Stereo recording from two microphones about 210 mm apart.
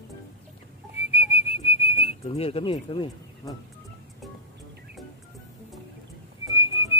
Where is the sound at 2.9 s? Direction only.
25° left (ahead or behind).